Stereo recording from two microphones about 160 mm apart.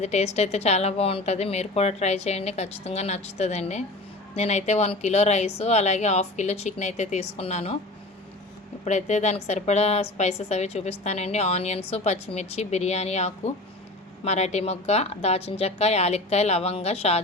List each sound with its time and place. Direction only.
0.0 s a woman's voice: 45° left (ahead or behind)
8.8 s a woman's voice: 45° left (ahead or behind)